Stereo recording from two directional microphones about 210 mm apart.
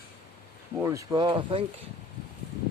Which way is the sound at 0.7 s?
15° right (ahead or behind).